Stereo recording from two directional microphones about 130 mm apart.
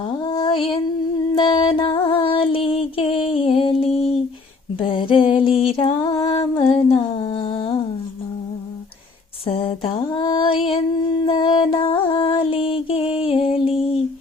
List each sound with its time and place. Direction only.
0.2 s mantra: 30° left (ahead or behind)
1.4 s music: 40° left (ahead or behind)
3.2 s a sound: 45° left (ahead or behind)
6.0 s female singing: 35° left (ahead or behind)
6.5 s humming: 40° left (ahead or behind)
9.5 s a sound: 45° left (ahead or behind)
13.2 s music: 45° left (ahead or behind)